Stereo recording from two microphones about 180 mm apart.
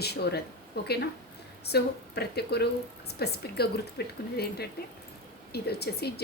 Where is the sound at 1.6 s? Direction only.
65° left (ahead or behind).